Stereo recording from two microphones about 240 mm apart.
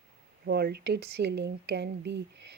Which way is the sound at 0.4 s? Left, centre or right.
Right.